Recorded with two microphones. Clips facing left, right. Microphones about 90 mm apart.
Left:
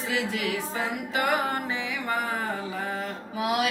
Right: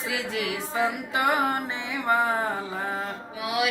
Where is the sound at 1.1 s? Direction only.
20° right (ahead or behind).